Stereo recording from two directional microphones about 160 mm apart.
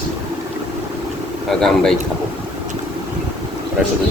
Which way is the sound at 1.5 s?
Centre (ahead or behind).